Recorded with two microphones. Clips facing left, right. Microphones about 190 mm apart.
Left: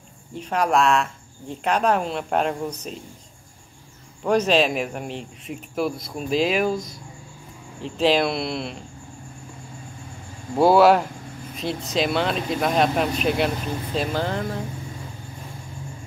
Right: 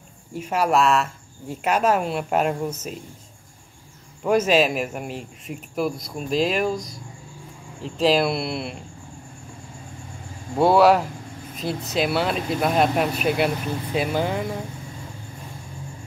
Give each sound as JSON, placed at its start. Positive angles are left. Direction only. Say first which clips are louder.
{"t": 0.3, "sound": "speech", "louder": "right 1 dB", "side_deg": -5}
{"t": 4.2, "sound": "speech", "louder": "right 1 dB", "side_deg": -5}
{"t": 10.6, "sound": "speech", "louder": "left 1 dB", "side_deg": 0}